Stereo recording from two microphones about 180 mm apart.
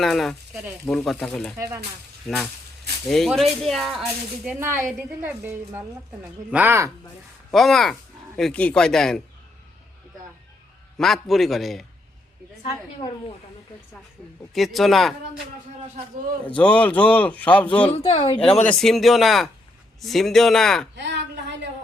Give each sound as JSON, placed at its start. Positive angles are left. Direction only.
{"t": 0.0, "sound": "speech", "side_deg": 0}
{"t": 4.4, "sound": "a woman's voice", "side_deg": -10}
{"t": 7.5, "sound": "speech", "side_deg": 0}
{"t": 10.9, "sound": "speech", "side_deg": 0}
{"t": 14.5, "sound": "speech", "side_deg": 0}
{"t": 16.6, "sound": "speech", "side_deg": 10}
{"t": 17.9, "sound": "a woman's voice", "side_deg": 30}
{"t": 18.7, "sound": "speech", "side_deg": 0}
{"t": 20.9, "sound": "a woman's voice", "side_deg": -75}